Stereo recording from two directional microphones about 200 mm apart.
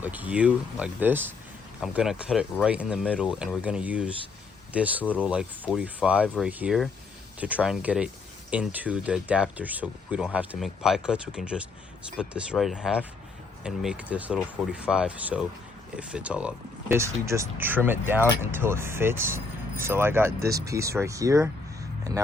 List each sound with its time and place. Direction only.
0.0 s speech: 10° right (ahead or behind)